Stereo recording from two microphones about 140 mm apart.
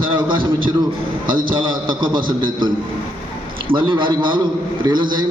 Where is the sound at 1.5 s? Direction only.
35° right (ahead or behind).